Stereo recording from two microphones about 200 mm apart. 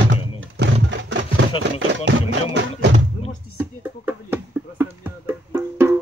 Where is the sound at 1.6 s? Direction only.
65° right (ahead or behind).